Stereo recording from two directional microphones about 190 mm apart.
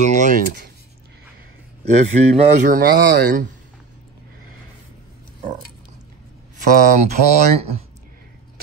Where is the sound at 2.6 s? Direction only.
50° right (ahead or behind).